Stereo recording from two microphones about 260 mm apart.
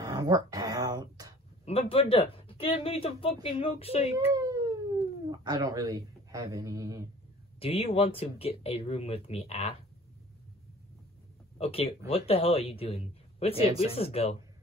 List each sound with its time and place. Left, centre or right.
0.0 s a sound: centre
1.7 s speech: left
4.3 s cat: centre
7.6 s speech: left
11.5 s speech: left